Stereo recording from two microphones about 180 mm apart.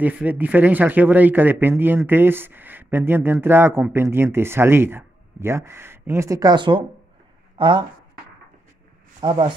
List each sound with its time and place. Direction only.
0.0 s speech: 10° right (ahead or behind); by 7.8 s 25° right (ahead or behind)
9.2 s speech: 25° right (ahead or behind)